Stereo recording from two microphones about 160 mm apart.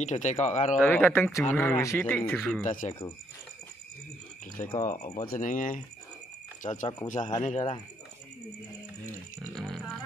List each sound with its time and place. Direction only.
0.0 s speech: 45° left (ahead or behind)
0.7 s speech: 10° left (ahead or behind)
2.3 s speech: centre (ahead or behind)
2.6 s speech: 50° left (ahead or behind)
4.8 s speech: 50° left (ahead or behind)
9.5 s music: centre (ahead or behind)